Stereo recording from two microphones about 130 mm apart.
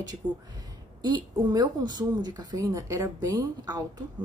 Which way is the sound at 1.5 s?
30° right (ahead or behind).